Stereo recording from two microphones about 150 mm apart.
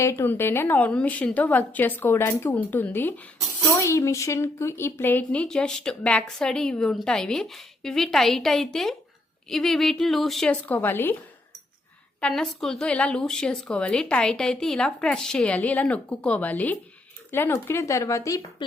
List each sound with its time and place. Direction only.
0.0 s a woman's voice: 15° left (ahead or behind)
12.2 s a woman's voice: 5° left (ahead or behind); by 18.4 s 20° left (ahead or behind)